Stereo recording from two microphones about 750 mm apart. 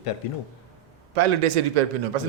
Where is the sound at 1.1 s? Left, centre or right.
Right.